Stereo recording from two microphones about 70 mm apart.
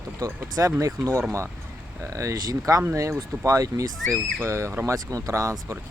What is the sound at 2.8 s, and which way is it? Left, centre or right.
Speech, right.